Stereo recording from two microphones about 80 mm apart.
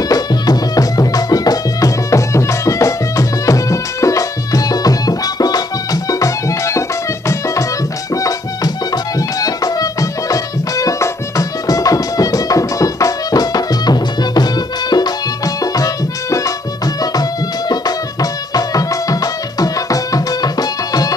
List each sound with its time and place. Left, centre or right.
0.1 s music: left
8.2 s music: left